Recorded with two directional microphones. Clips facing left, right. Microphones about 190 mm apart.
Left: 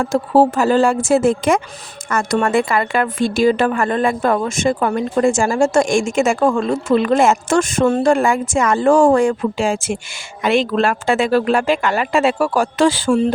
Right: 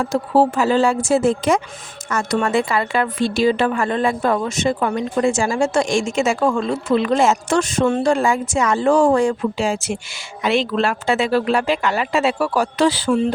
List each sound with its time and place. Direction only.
0.0 s a woman's voice: 45° left (ahead or behind)